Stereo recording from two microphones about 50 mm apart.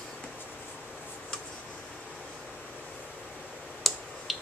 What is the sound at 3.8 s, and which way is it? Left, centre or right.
Clicking, centre.